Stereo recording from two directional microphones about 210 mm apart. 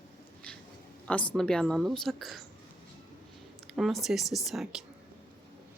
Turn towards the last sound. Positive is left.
turn(degrees=0)  # may be behind; listen again after turning